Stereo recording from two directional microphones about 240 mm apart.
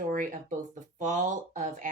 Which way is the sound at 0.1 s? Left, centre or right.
Right.